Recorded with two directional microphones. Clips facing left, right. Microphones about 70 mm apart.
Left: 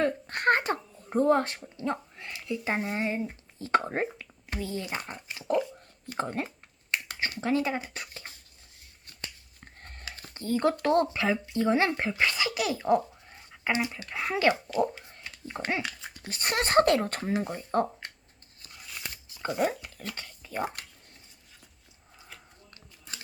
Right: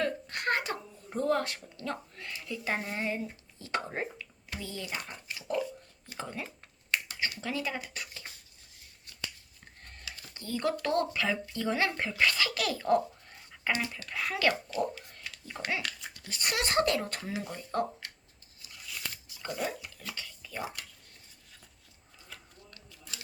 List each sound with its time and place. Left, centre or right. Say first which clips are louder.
0.0 s a sound: left 6 dB; left
1.5 s a child's voice: left 5 dB; left
6.1 s speech: left 8 dB; left
7.1 s a sound: left 2 dB; left
7.3 s speech: left 11 dB; left
9.6 s a sound: left 3 dB; left
10.8 s a child's voice: left 4 dB; left
19.1 s shuffling cards: left 6 dB; left
19.5 s speech: left 7 dB; left
22.7 s scissors: left 2 dB; left